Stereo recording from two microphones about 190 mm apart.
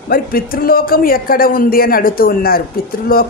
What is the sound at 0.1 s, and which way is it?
A woman's voice, 50° left (ahead or behind).